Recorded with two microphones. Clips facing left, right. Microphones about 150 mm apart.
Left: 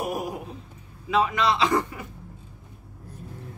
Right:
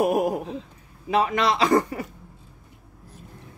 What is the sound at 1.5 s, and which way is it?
Speech, 40° right (ahead or behind).